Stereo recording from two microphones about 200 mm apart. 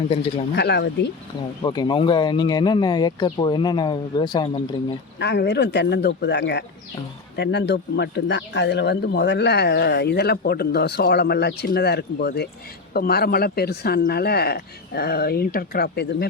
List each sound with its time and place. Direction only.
0.5 s speech: 55° left (ahead or behind)
1.6 s speech: 20° left (ahead or behind)
5.2 s speech: 60° left (ahead or behind)